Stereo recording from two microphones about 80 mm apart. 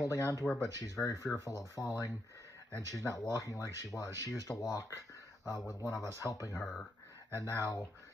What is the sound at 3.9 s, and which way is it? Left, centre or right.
Speech, centre.